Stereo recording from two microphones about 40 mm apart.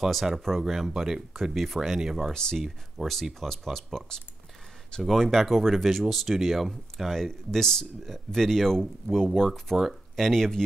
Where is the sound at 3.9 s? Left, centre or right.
Centre.